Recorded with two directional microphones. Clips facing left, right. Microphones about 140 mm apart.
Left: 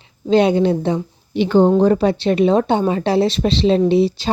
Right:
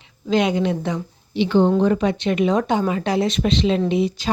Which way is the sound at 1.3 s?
45° left (ahead or behind).